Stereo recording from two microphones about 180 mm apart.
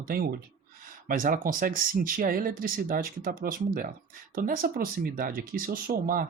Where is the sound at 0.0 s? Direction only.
55° right (ahead or behind).